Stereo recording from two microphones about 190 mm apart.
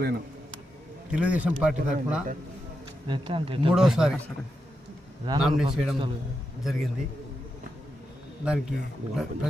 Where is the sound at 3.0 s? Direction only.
25° right (ahead or behind).